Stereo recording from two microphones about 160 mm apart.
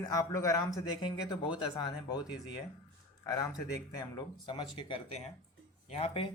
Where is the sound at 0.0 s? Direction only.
20° left (ahead or behind).